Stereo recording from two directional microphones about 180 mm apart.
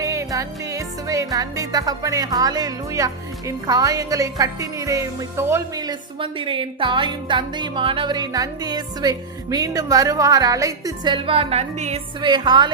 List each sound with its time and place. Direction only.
0.0 s music: 15° right (ahead or behind)